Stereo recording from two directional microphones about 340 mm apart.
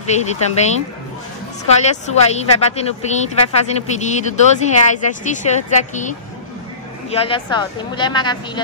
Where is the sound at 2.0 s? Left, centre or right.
Centre.